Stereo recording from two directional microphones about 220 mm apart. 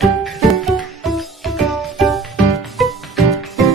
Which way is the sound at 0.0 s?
Centre (ahead or behind).